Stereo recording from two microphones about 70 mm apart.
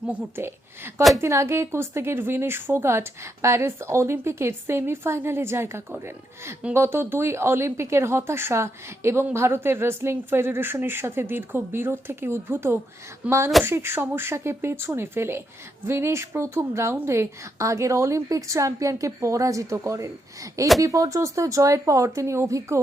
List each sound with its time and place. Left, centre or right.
0.3 s a woman's voice: right
13.2 s speech: centre
13.7 s a woman's voice: right